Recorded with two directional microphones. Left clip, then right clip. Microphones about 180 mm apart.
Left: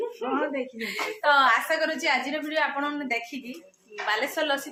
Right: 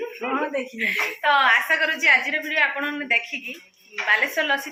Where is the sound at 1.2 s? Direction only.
5° left (ahead or behind).